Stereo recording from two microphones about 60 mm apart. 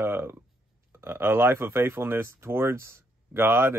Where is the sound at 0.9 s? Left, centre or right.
Right.